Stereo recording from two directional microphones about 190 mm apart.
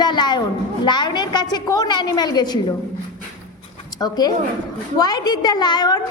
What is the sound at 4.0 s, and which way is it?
A woman's voice, 20° left (ahead or behind).